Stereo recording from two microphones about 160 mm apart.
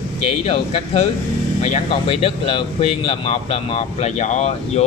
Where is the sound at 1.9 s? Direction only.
35° left (ahead or behind).